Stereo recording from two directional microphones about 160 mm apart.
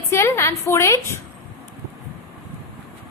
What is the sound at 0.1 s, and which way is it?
A woman's voice, 15° left (ahead or behind).